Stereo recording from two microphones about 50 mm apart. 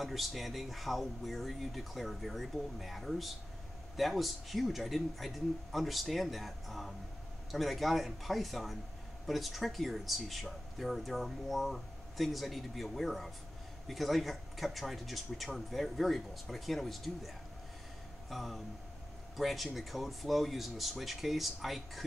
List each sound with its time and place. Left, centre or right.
0.0 s speech: centre